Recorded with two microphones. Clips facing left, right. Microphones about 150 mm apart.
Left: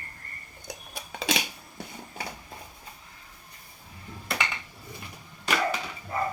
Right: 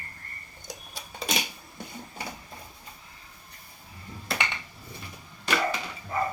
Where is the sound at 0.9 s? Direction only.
90° left.